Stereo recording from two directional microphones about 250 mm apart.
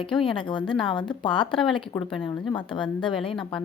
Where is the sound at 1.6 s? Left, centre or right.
Centre.